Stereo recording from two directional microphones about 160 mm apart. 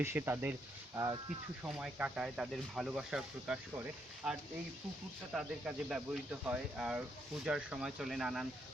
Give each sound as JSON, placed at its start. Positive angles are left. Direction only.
{"t": 0.0, "sound": "speech", "side_deg": -15}
{"t": 0.9, "sound": "speech", "side_deg": -25}
{"t": 1.6, "sound": "speech", "side_deg": -5}
{"t": 5.3, "sound": "speech", "side_deg": -5}